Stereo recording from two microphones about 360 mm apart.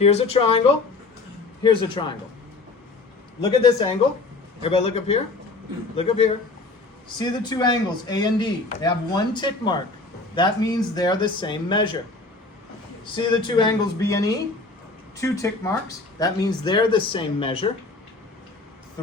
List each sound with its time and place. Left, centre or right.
0.0 s a man's voice: centre
1.6 s a man's voice: centre
3.4 s a man's voice: centre
13.1 s a man's voice: centre